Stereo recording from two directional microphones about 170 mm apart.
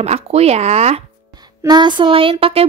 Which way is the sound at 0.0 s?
40° right (ahead or behind).